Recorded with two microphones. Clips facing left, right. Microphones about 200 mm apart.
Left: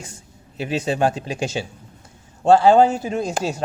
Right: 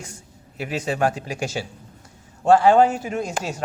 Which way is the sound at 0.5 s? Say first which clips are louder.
Left 3 dB; 25° left (ahead or behind).